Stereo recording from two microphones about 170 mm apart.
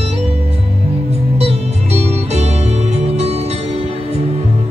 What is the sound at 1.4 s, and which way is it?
Music, 40° right (ahead or behind).